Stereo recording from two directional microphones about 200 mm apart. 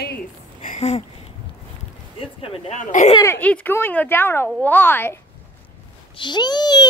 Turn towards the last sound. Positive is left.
turn(degrees=20)  # may be behind; listen again after turning